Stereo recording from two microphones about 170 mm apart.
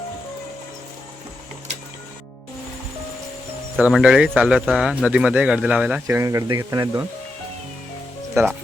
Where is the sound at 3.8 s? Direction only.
5° right (ahead or behind).